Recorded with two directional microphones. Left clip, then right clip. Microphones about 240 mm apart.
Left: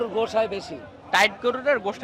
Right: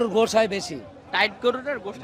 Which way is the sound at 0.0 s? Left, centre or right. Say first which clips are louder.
Right 3 dB; right.